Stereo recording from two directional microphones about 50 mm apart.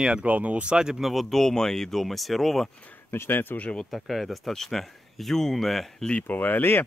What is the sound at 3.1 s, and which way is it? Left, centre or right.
Speech, left.